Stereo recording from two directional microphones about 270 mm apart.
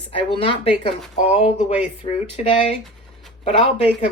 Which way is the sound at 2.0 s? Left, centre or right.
Centre.